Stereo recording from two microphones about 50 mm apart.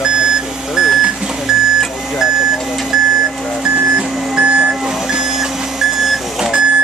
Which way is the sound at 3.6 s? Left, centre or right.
Centre.